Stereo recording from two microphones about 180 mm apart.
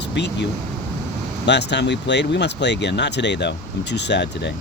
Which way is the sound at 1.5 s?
75° left (ahead or behind).